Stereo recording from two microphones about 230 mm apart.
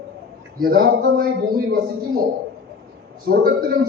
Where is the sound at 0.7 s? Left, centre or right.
Right.